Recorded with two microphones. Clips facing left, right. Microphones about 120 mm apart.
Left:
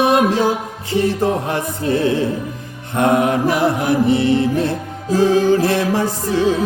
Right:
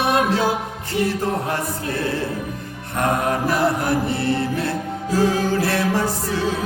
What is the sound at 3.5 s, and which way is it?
Music, 15° left (ahead or behind).